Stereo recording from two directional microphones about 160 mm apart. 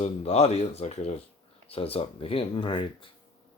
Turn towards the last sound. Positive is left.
turn(degrees=30)  # may be behind; listen again after turning